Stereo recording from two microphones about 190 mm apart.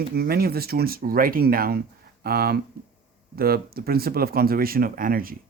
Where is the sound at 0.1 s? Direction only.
55° right (ahead or behind).